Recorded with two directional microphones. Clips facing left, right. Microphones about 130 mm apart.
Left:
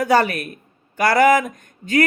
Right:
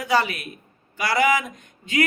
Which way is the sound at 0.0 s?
50° left (ahead or behind).